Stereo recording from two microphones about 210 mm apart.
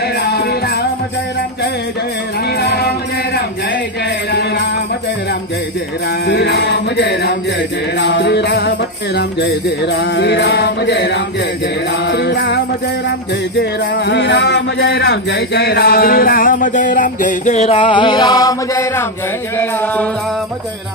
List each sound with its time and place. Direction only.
0.0 s music: 50° left (ahead or behind)
2.5 s music: 50° left (ahead or behind)
4.3 s music: 50° left (ahead or behind)
6.2 s jingle bell: 55° left (ahead or behind)
13.6 s music: 55° left (ahead or behind); by 20.1 s 10° left (ahead or behind)